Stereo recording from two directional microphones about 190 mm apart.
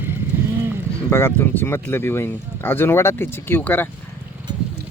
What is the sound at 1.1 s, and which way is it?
Speech, 10° left (ahead or behind).